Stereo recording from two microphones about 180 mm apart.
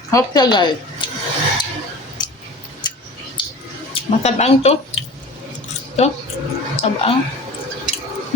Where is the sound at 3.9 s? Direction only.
35° left (ahead or behind).